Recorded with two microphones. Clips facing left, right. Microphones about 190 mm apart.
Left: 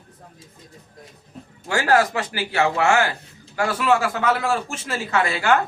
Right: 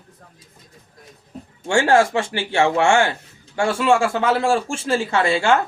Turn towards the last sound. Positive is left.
turn(degrees=-25)  # may be behind; listen again after turning